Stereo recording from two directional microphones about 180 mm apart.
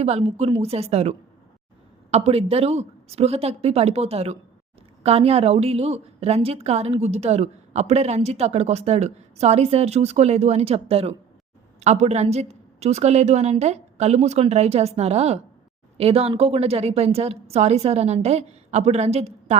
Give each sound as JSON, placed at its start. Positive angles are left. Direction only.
{"t": 0.0, "sound": "a woman's voice", "side_deg": -35}